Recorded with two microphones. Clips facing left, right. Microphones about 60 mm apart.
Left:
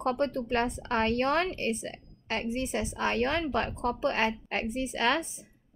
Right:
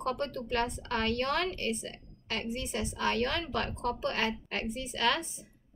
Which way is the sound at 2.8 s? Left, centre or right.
Centre.